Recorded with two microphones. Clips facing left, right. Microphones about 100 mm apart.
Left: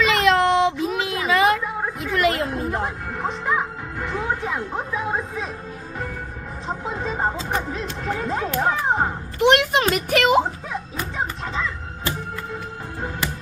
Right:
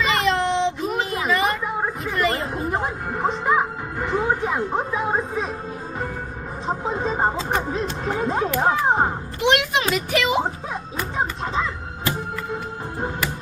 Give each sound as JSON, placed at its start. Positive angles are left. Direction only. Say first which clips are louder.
{"t": 0.0, "sound": "child singing", "louder": "left 3 dB", "side_deg": 90}
{"t": 1.3, "sound": "a sound", "louder": "left 5 dB", "side_deg": 90}
{"t": 2.6, "sound": "music", "louder": "right 1 dB", "side_deg": -20}
{"t": 4.7, "sound": "a woman's voice", "louder": "right 3 dB", "side_deg": -35}
{"t": 6.7, "sound": "speech", "louder": "right 3 dB", "side_deg": -25}
{"t": 9.5, "sound": "a sound", "louder": "left 2 dB", "side_deg": 45}
{"t": 9.9, "sound": "speech", "louder": "left 2 dB", "side_deg": 55}